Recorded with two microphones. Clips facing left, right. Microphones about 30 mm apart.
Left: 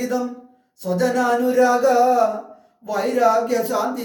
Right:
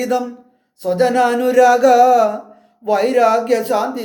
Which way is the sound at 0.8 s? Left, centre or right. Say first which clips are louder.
Right 5 dB; right.